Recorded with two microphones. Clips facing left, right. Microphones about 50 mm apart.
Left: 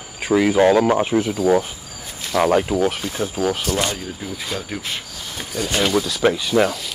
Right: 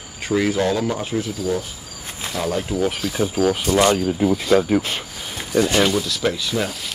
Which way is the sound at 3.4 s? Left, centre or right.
Right.